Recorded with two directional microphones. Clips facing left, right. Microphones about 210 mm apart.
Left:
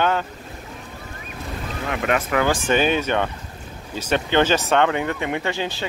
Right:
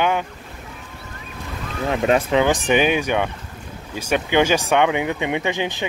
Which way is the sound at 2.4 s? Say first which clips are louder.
Right 2 dB; 20° right (ahead or behind).